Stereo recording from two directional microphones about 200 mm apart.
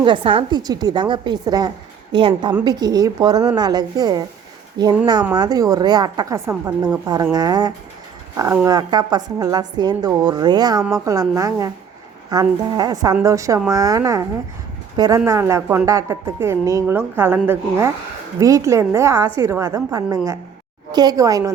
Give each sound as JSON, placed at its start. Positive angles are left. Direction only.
{"t": 0.0, "sound": "a woman's voice", "side_deg": -25}